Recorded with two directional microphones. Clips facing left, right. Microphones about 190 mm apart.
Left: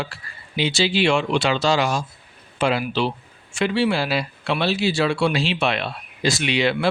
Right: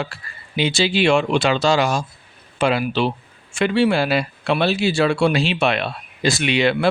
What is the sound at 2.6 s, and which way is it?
Speech, 60° right (ahead or behind).